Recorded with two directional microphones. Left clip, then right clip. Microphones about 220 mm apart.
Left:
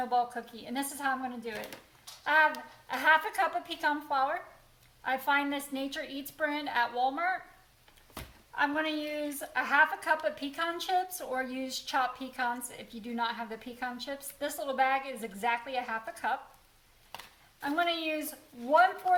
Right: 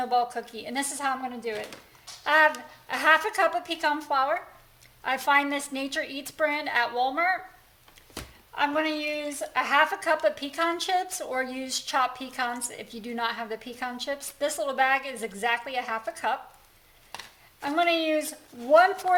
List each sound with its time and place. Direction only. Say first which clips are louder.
0.0 s a woman's voice: right 4 dB; 40° right (ahead or behind)
8.5 s a woman's voice: right 4 dB; 40° right (ahead or behind)
17.6 s a woman's voice: right 6 dB; 40° right (ahead or behind)